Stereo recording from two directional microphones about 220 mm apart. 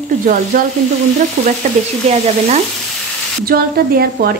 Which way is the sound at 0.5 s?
40° right (ahead or behind).